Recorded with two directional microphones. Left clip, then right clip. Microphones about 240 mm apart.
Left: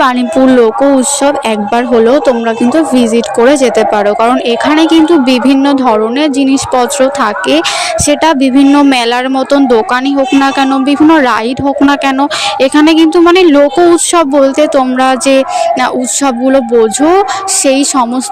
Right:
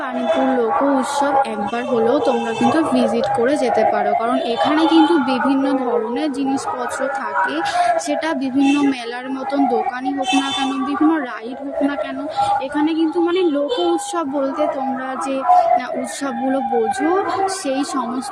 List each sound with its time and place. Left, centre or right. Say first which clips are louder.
0.5 s speech: left 10 dB; left
8.0 s speech: left 13 dB; left
12.6 s speech: left 13 dB; left
17.7 s speech: left 12 dB; left